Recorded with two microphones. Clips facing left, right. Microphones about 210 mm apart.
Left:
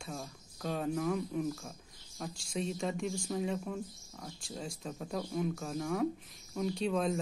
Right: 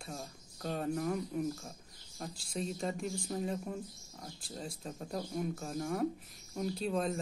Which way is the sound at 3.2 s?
40° right (ahead or behind).